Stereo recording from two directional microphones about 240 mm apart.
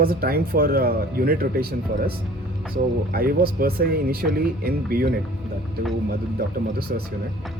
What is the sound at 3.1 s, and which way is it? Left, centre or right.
Speech, right.